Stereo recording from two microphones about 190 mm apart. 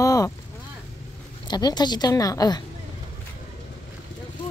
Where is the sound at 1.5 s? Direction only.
20° left (ahead or behind).